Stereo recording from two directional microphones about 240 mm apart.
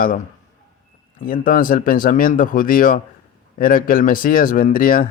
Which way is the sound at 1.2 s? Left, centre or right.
Left.